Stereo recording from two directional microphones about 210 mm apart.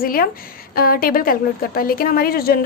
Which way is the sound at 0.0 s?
45° left (ahead or behind).